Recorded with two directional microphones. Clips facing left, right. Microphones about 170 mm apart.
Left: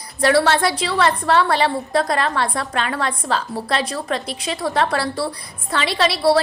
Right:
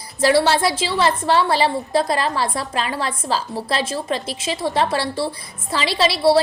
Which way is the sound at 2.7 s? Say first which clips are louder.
Left 1 dB; 30° right (ahead or behind).